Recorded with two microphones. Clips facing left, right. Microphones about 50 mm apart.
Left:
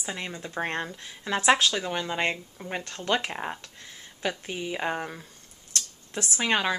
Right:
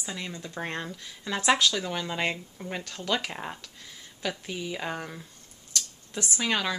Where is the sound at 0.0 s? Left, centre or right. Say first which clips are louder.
Left 2 dB; left.